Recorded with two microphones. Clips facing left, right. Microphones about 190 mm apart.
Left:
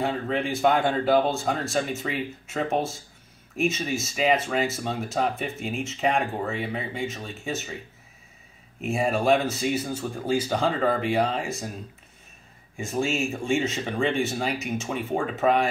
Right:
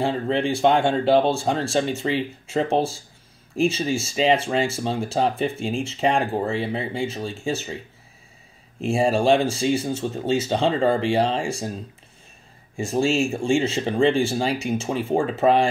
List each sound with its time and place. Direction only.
0.0 s speech: 30° right (ahead or behind)
8.8 s speech: 30° right (ahead or behind)
12.7 s speech: 30° right (ahead or behind)